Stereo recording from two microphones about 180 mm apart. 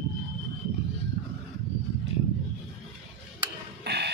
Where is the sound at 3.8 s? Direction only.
65° right (ahead or behind).